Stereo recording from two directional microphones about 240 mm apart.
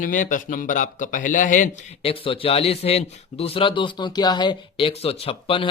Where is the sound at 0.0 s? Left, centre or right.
Left.